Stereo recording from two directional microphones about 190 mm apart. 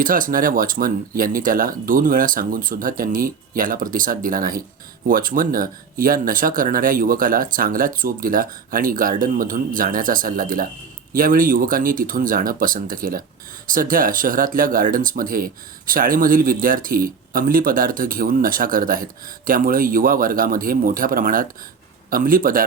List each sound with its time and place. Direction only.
0.0 s speech: 45° right (ahead or behind)